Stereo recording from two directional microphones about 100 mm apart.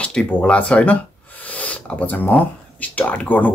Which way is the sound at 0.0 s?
10° left (ahead or behind).